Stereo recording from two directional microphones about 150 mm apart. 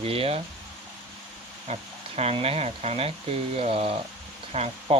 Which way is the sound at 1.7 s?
45° right (ahead or behind).